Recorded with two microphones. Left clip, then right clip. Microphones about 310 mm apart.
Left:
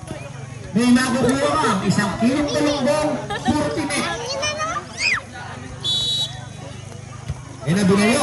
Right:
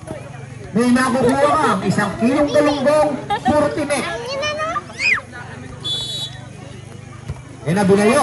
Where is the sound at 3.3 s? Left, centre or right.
Right.